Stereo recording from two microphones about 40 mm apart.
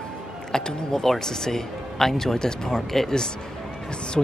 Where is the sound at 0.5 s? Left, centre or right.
Centre.